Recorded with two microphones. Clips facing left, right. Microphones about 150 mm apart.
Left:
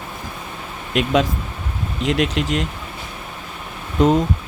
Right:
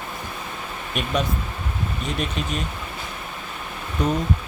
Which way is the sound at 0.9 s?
90° left.